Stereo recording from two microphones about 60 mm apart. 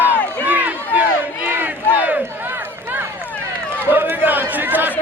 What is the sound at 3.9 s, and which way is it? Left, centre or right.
Chatter, right.